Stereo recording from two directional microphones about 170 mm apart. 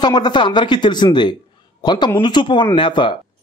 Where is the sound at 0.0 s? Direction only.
25° left (ahead or behind).